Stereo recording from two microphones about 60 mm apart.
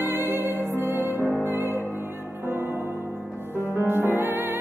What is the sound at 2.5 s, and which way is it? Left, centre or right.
Music, right.